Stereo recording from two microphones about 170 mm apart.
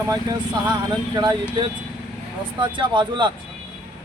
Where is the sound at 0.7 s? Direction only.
25° right (ahead or behind).